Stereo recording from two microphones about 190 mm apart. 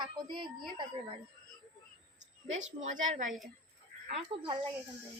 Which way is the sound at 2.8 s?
40° right (ahead or behind).